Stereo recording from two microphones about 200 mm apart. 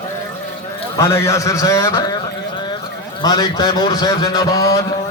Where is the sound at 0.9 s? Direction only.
15° left (ahead or behind).